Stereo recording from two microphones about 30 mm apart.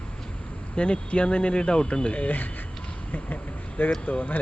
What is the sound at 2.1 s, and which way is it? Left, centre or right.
Speech, left.